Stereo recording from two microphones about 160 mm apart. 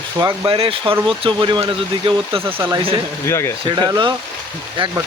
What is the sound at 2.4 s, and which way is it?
Speech, 15° right (ahead or behind).